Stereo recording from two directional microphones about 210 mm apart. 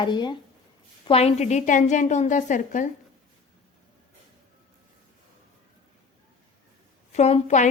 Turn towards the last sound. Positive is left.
turn(degrees=35)  # may be behind; listen again after turning